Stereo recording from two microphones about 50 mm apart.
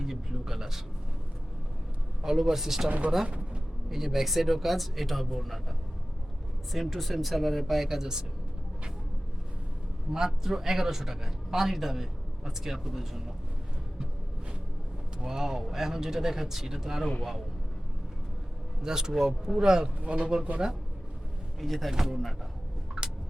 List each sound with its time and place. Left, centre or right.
0.0 s speech: centre
2.2 s a man's voice: centre
3.2 s a sound: right
3.8 s speech: centre
6.7 s speech: centre
10.1 s a man's voice: centre
15.2 s a man's voice: centre
18.8 s a man's voice: centre
20.0 s speech: right
21.6 s speech: centre
23.0 s a sound: centre